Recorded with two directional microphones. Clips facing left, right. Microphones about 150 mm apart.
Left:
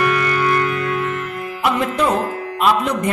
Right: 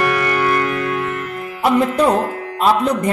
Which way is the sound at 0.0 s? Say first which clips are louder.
Right 1 dB; 50° right (ahead or behind).